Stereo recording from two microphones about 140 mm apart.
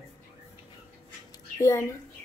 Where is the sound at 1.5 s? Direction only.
20° left (ahead or behind).